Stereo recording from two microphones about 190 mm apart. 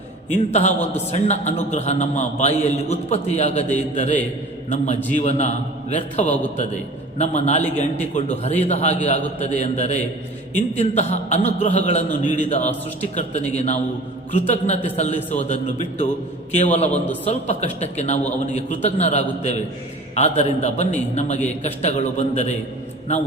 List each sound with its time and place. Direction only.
0.5 s a man's voice: 35° left (ahead or behind)